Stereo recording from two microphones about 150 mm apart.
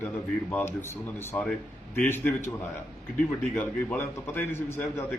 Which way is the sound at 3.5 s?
10° left (ahead or behind).